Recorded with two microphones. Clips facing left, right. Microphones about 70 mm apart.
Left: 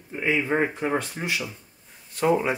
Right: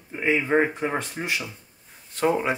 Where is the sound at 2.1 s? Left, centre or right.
Right.